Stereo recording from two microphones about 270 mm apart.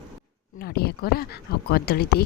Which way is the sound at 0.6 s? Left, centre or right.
Left.